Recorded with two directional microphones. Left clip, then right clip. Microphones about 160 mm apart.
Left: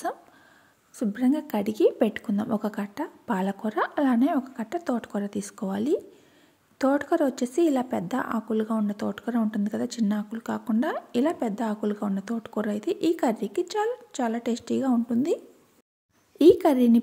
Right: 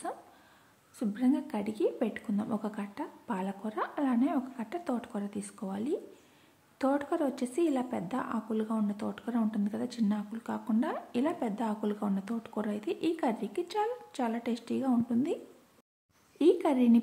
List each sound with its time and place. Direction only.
0.9 s speech: 40° left (ahead or behind)
16.3 s speech: 35° left (ahead or behind)